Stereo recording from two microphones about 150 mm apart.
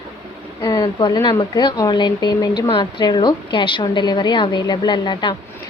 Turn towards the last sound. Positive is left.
turn(degrees=30)  # may be behind; listen again after turning